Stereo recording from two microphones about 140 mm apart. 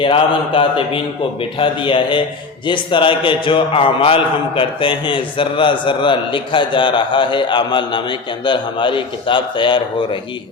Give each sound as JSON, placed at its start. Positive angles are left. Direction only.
{"t": 0.0, "sound": "a man's voice", "side_deg": 35}